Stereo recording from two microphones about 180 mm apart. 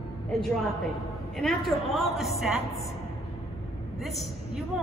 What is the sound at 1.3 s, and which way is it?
A woman's voice, centre (ahead or behind).